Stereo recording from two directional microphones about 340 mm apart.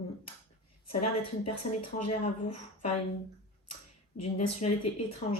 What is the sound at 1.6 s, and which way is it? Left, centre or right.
Speech, centre.